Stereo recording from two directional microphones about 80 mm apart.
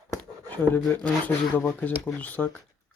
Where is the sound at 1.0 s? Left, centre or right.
Centre.